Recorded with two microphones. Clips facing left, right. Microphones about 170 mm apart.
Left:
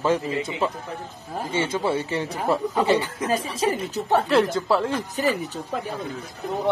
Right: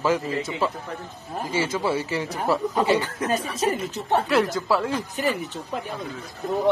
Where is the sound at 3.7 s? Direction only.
35° left (ahead or behind).